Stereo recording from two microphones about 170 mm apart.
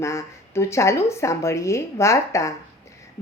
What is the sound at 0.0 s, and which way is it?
A woman's voice, 15° left (ahead or behind).